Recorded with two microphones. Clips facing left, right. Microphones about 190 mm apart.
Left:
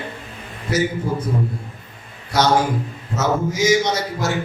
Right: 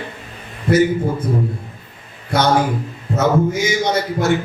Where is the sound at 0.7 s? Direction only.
55° right (ahead or behind).